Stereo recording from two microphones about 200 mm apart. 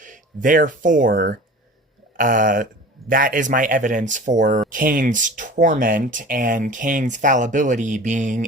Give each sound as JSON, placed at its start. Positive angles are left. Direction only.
{"t": 0.0, "sound": "speech", "side_deg": -40}
{"t": 2.1, "sound": "a sound", "side_deg": -40}
{"t": 3.1, "sound": "speech", "side_deg": -45}